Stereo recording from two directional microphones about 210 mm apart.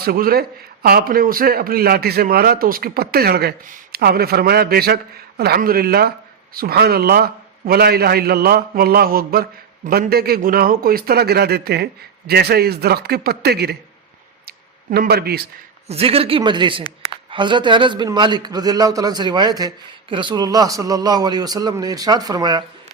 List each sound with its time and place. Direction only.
0.0 s speech: 45° right (ahead or behind)
14.4 s a sound: 45° right (ahead or behind)
15.9 s a man's voice: 30° right (ahead or behind)